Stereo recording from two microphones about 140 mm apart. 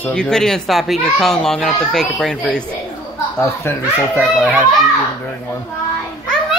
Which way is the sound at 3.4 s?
20° left (ahead or behind).